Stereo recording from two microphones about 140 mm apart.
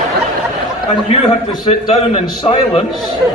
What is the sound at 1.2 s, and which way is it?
A man's voice, 45° left (ahead or behind).